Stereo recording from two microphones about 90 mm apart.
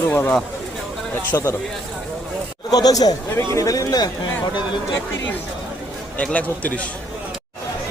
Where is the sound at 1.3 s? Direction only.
35° left (ahead or behind).